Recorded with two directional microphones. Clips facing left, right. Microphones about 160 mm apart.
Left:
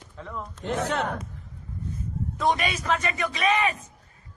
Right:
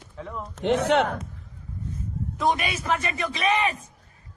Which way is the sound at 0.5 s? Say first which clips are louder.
Right 7 dB; 80° right.